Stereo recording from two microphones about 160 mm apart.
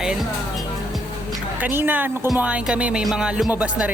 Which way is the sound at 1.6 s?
10° right (ahead or behind).